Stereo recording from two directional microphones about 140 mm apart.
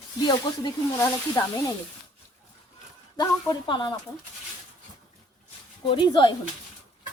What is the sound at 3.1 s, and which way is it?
Speech, 30° left (ahead or behind).